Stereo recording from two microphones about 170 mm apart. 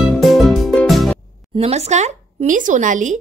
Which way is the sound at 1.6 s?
40° right (ahead or behind).